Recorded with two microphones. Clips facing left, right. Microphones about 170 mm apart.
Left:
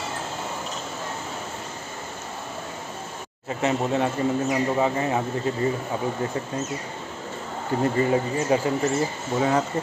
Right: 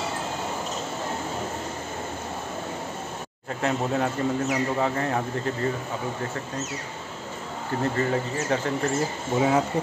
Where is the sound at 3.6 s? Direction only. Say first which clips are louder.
Left 2 dB; centre (ahead or behind).